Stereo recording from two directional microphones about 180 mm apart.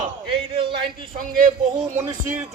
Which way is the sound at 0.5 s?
30° right (ahead or behind).